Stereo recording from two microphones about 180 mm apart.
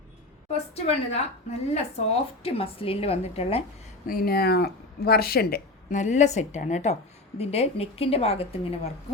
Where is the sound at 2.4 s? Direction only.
30° left (ahead or behind).